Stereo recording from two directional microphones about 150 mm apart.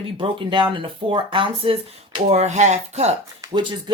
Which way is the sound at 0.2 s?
35° right (ahead or behind).